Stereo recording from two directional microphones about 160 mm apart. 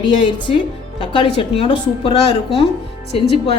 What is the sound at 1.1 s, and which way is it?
A woman's voice, 35° left (ahead or behind).